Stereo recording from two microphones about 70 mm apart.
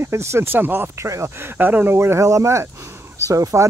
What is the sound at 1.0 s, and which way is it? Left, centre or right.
Speech, right.